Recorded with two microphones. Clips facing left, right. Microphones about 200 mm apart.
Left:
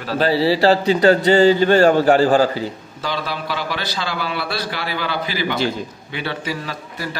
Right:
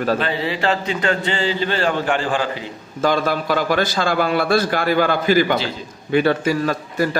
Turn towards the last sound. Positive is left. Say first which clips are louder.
# right 9 dB
turn(degrees=-50)  # may be behind; listen again after turning